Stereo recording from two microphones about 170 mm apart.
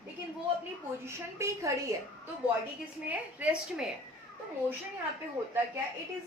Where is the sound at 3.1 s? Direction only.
5° right (ahead or behind).